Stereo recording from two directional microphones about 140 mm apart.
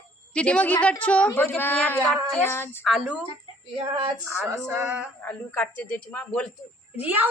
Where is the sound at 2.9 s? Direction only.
Centre (ahead or behind).